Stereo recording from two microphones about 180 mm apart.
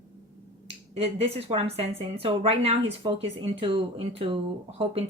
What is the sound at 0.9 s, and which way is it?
Speech, 35° right (ahead or behind).